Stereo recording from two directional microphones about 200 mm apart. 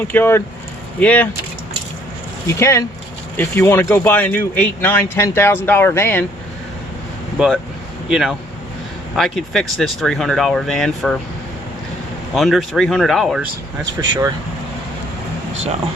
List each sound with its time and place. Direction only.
0.1 s speech: 10° left (ahead or behind)
2.5 s speech: 15° left (ahead or behind)
7.3 s speech: 5° right (ahead or behind)
12.3 s speech: centre (ahead or behind)
14.0 s speech: 20° right (ahead or behind)